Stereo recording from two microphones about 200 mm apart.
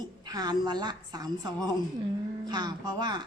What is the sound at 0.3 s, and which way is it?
A woman's voice, 20° right (ahead or behind).